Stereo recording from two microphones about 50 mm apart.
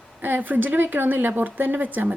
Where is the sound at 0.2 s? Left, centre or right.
Right.